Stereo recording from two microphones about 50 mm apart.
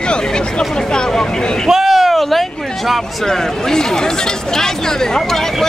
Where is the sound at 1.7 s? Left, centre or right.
Centre.